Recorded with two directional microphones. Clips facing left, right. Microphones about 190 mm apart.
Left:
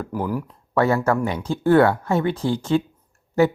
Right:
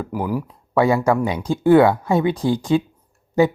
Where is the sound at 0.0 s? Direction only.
10° right (ahead or behind).